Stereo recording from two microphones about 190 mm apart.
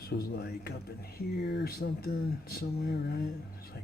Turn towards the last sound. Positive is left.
turn(degrees=55)  # may be behind; listen again after turning